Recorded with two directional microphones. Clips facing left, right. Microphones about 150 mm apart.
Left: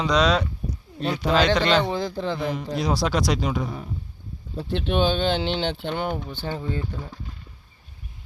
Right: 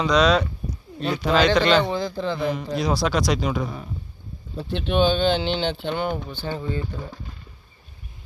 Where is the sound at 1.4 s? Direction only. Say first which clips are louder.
Right 2 dB; 25° left (ahead or behind).